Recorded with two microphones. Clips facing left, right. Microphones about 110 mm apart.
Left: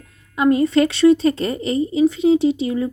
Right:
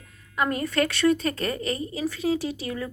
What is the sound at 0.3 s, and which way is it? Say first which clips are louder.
Speech: left 9 dB; 25° left (ahead or behind).